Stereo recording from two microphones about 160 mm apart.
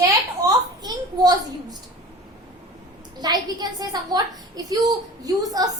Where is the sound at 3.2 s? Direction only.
25° right (ahead or behind).